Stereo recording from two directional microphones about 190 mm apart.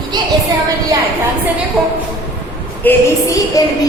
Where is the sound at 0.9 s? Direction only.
15° right (ahead or behind).